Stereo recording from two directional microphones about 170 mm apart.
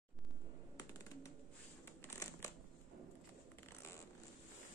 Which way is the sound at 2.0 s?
15° left (ahead or behind).